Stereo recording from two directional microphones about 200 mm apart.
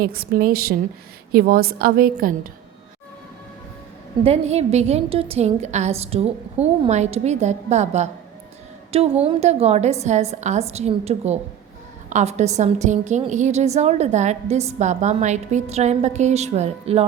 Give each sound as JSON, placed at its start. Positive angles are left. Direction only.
{"t": 0.0, "sound": "a woman's voice", "side_deg": -50}
{"t": 4.2, "sound": "a woman's voice", "side_deg": -30}